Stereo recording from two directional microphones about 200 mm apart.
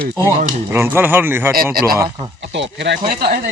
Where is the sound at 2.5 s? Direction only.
60° right (ahead or behind).